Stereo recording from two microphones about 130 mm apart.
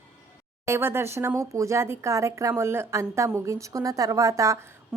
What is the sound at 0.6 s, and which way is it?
Speech, 20° right (ahead or behind).